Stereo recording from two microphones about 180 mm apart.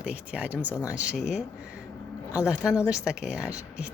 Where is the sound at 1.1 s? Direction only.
40° left (ahead or behind).